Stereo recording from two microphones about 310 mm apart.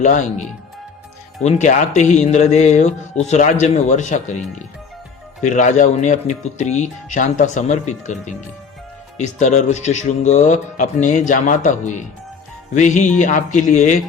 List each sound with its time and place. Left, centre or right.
0.0 s speech: left
5.4 s speech: left